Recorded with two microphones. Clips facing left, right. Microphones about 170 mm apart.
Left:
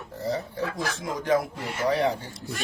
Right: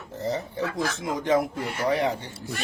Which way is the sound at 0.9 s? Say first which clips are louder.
Even; 20° right (ahead or behind).